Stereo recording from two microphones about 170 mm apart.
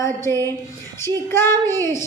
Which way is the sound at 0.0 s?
15° left (ahead or behind).